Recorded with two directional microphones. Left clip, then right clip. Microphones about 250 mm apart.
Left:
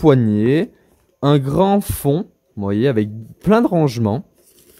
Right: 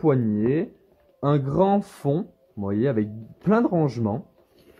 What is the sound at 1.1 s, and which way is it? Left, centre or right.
Speech, left.